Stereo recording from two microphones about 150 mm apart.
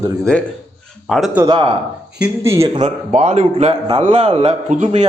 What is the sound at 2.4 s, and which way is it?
Speech, 20° right (ahead or behind).